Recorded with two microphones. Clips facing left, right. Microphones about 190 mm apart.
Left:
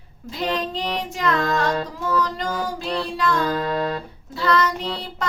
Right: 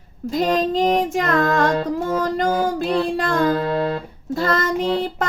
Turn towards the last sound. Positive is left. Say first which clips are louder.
# right 9 dB
turn(degrees=-50)  # may be behind; listen again after turning